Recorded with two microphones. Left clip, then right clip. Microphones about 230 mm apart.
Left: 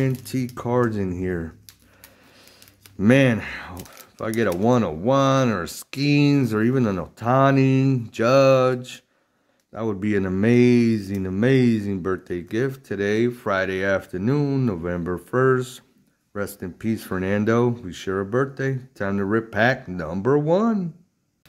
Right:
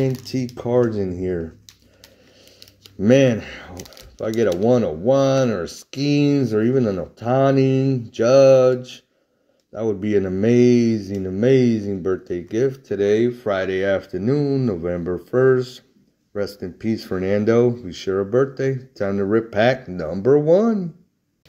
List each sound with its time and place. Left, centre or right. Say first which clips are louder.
0.0 s speech: right 3 dB; centre
3.0 s speech: right 3 dB; centre